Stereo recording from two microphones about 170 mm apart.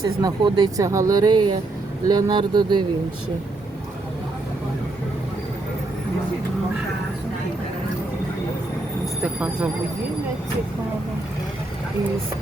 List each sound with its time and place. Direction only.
0.0 s speech: 20° right (ahead or behind)
9.2 s speech: 5° right (ahead or behind)